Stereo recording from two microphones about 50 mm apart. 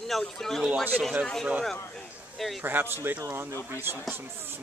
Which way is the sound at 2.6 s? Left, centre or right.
Right.